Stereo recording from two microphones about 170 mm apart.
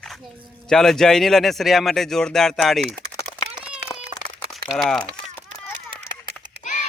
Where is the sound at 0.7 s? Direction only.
Centre (ahead or behind).